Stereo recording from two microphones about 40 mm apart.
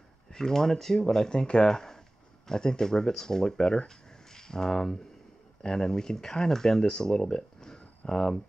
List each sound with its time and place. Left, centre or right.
0.3 s speech: centre